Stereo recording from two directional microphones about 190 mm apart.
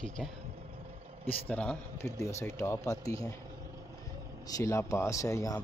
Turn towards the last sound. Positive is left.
turn(degrees=15)  # may be behind; listen again after turning